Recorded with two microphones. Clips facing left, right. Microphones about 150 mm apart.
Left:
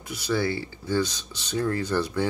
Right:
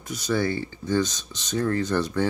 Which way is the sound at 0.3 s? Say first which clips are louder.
Right 1 dB; 50° right (ahead or behind).